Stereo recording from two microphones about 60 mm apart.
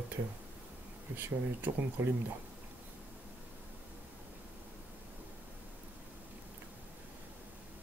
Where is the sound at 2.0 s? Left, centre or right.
Right.